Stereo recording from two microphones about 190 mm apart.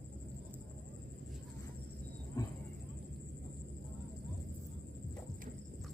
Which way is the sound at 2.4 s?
20° left (ahead or behind).